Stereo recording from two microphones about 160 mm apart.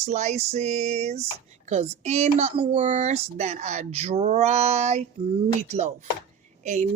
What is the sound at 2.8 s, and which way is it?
Speech, 45° right (ahead or behind).